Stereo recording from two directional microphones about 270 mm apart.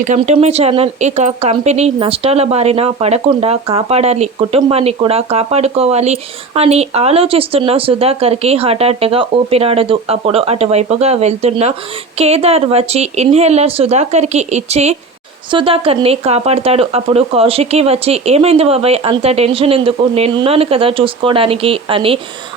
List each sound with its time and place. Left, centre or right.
0.0 s speech: right